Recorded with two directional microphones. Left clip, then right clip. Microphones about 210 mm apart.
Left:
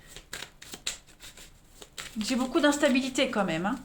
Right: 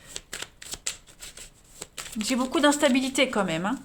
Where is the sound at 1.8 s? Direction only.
30° right (ahead or behind).